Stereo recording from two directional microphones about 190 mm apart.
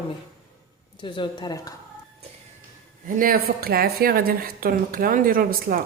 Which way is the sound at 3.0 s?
50° right (ahead or behind).